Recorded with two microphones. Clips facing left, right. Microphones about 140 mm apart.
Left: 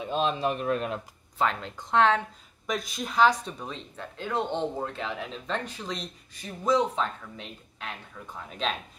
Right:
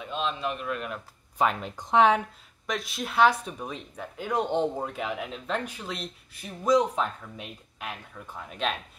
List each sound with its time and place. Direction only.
0.0 s speech: 40° left (ahead or behind)
1.4 s speech: 15° right (ahead or behind)
2.6 s speech: centre (ahead or behind)